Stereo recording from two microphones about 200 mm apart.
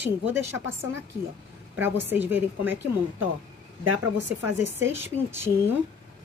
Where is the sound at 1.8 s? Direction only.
10° right (ahead or behind).